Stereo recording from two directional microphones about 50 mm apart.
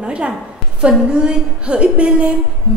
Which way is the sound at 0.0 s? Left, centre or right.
Right.